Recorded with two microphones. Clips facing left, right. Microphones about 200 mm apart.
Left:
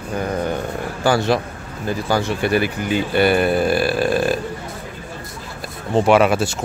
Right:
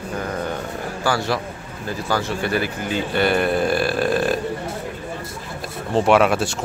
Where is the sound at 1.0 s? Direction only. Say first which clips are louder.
Left 5 dB; 20° left (ahead or behind); by 4.3 s centre (ahead or behind).